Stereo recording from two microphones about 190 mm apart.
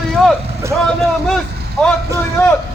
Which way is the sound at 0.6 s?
15° right (ahead or behind).